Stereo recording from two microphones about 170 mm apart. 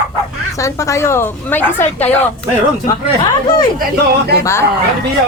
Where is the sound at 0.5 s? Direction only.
20° left (ahead or behind).